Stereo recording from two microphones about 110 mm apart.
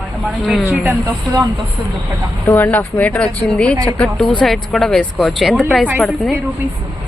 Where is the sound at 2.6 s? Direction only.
15° left (ahead or behind); by 5.8 s centre (ahead or behind).